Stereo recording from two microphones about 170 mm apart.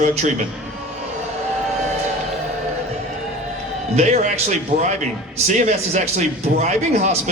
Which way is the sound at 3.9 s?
40° right (ahead or behind).